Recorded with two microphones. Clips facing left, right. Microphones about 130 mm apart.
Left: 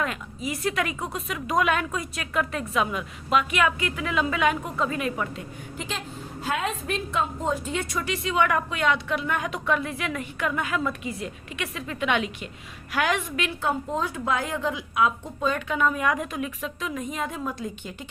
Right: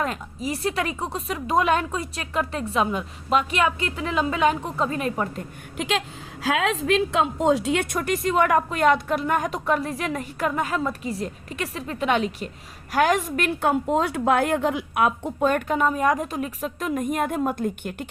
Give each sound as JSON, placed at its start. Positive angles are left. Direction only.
{"t": 0.0, "sound": "a woman's voice", "side_deg": -35}
{"t": 5.7, "sound": "speech", "side_deg": -70}
{"t": 6.4, "sound": "a woman's voice", "side_deg": -90}